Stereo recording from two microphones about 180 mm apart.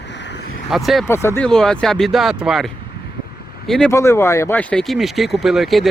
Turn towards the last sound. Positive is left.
turn(degrees=0)  # may be behind; listen again after turning